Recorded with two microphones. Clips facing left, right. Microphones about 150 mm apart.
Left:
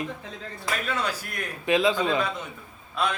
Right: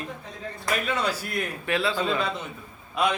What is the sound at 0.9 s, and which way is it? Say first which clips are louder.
Speech: right 2 dB; 10° right (ahead or behind).